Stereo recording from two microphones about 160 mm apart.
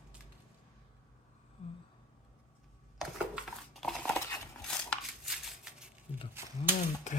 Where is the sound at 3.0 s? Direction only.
Centre (ahead or behind).